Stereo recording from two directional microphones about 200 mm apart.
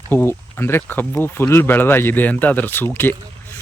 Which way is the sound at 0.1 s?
10° left (ahead or behind).